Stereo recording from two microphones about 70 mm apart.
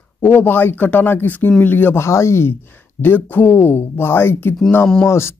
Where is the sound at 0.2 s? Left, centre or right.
Left.